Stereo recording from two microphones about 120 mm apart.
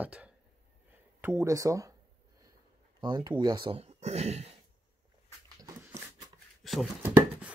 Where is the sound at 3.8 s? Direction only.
60° right (ahead or behind).